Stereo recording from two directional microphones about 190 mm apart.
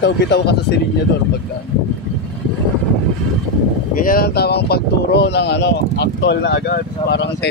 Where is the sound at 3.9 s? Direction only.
50° left (ahead or behind).